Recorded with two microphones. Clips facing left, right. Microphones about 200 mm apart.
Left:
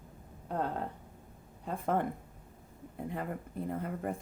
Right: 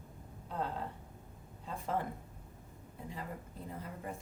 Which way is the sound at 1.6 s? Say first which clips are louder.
Left 5 dB; 55° left (ahead or behind).